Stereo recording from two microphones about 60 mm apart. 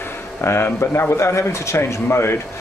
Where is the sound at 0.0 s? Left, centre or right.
Left.